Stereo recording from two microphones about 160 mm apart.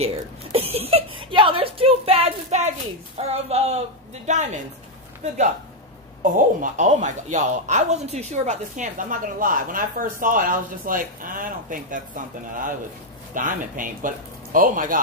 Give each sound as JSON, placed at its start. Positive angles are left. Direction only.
{"t": 0.0, "sound": "a sound", "side_deg": -40}
{"t": 3.2, "sound": "speech", "side_deg": -40}
{"t": 6.2, "sound": "speech", "side_deg": -55}
{"t": 13.3, "sound": "speech", "side_deg": -55}